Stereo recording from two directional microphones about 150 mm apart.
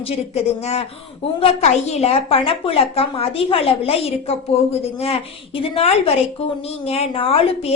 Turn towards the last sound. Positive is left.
turn(degrees=40)  # may be behind; listen again after turning